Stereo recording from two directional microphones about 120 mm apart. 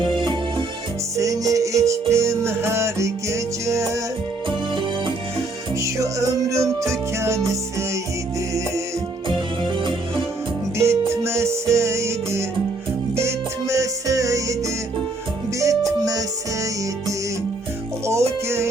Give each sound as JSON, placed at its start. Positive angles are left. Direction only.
{"t": 0.0, "sound": "music", "side_deg": -40}
{"t": 1.1, "sound": "music", "side_deg": -25}
{"t": 4.7, "sound": "music", "side_deg": -40}
{"t": 5.8, "sound": "music", "side_deg": -25}
{"t": 10.8, "sound": "music", "side_deg": -20}
{"t": 15.5, "sound": "music", "side_deg": -25}
{"t": 18.0, "sound": "music", "side_deg": -25}